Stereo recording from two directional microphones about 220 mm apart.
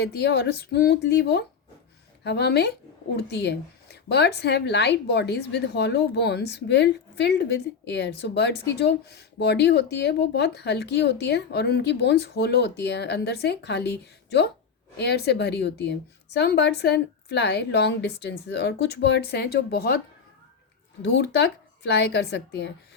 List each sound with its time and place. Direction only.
0.0 s speech: 50° left (ahead or behind)
21.0 s speech: 50° left (ahead or behind)